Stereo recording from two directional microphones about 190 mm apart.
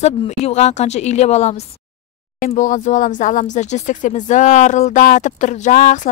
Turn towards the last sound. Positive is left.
turn(degrees=45)  # may be behind; listen again after turning